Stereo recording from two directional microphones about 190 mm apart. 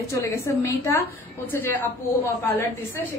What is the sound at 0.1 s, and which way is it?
A woman's voice, 15° left (ahead or behind).